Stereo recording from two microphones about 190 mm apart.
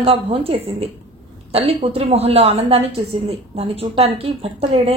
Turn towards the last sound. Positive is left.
turn(degrees=-30)  # may be behind; listen again after turning